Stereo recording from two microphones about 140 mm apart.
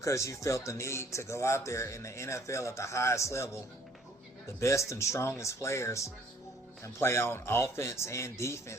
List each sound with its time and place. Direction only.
0.0 s speech: 20° left (ahead or behind)
4.6 s speech: 20° left (ahead or behind)